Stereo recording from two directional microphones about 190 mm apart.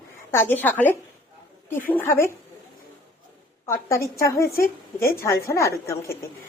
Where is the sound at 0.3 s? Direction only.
10° left (ahead or behind).